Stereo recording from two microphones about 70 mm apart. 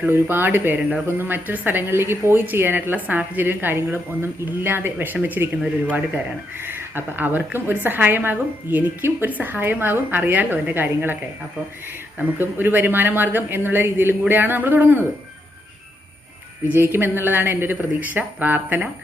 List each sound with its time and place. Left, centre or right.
0.1 s a woman's voice: right
0.8 s speech: centre
1.0 s a woman's voice: right
6.7 s a woman's voice: right
12.4 s a woman's voice: right
16.6 s a woman's voice: right